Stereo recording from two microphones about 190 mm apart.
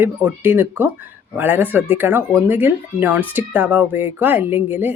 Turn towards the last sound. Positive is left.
turn(degrees=-10)  # may be behind; listen again after turning